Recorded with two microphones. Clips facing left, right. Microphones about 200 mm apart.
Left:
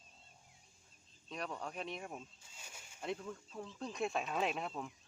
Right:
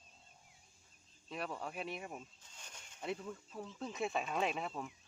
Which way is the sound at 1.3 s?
5° right (ahead or behind).